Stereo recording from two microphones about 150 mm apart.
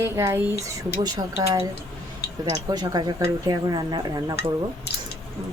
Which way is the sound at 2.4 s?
25° right (ahead or behind).